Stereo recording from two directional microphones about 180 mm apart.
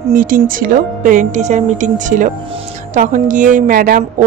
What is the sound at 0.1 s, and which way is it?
A woman's voice, 50° right (ahead or behind).